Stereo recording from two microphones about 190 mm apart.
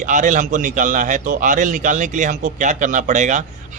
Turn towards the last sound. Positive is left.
turn(degrees=-40)  # may be behind; listen again after turning